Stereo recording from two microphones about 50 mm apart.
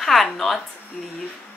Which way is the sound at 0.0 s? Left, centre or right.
Centre.